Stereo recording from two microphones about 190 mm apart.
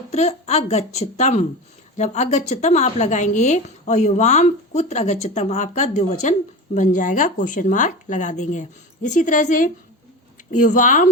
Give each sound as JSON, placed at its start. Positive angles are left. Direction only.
{"t": 0.1, "sound": "a woman's voice", "side_deg": 35}